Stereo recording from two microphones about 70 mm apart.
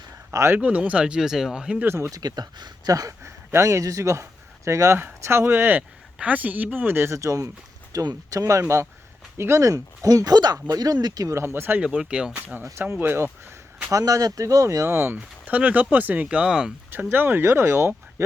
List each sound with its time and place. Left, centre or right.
0.5 s speech: right
1.8 s speech: right
2.0 s speech: right
7.2 s speech: right
11.3 s speech: right
11.8 s speech: centre
12.9 s speech: right
13.8 s speech: right
14.8 s speech: right; by 16.7 s centre
16.9 s speech: right